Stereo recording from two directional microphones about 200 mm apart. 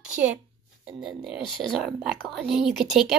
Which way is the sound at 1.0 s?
Centre (ahead or behind).